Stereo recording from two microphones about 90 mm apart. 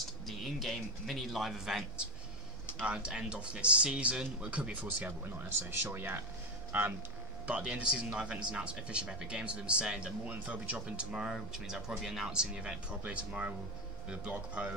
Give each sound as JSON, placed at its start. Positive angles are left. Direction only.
{"t": 0.3, "sound": "a man's voice", "side_deg": 0}